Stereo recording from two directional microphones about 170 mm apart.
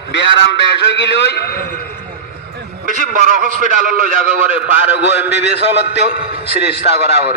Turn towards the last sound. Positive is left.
turn(degrees=70)  # may be behind; listen again after turning